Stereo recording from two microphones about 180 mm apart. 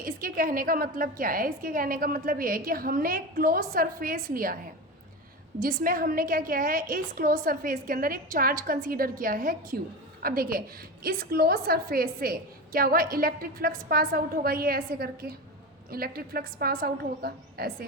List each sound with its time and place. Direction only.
0.0 s a woman's voice: 50° right (ahead or behind)
5.5 s a woman's voice: 50° right (ahead or behind)